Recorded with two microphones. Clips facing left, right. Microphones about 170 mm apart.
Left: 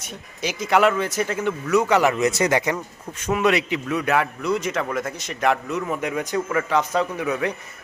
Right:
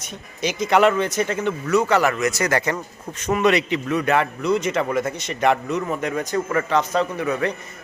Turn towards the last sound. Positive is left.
turn(degrees=10)  # may be behind; listen again after turning